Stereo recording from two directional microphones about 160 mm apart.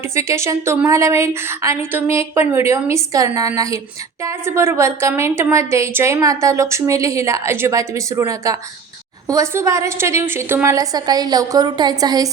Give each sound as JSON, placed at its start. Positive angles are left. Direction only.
{"t": 0.1, "sound": "a woman's voice", "side_deg": -15}